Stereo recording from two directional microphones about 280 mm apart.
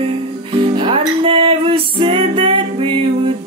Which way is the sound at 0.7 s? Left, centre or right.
Centre.